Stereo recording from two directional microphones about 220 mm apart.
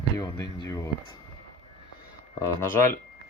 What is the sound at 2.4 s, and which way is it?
Speech, 10° left (ahead or behind).